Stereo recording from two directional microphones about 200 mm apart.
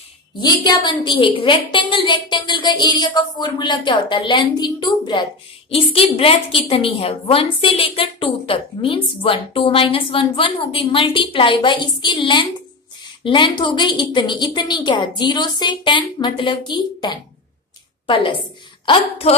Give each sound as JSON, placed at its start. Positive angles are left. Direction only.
{"t": 0.4, "sound": "a woman's voice", "side_deg": 20}